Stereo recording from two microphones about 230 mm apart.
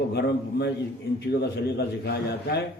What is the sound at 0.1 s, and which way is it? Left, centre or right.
Speech, left.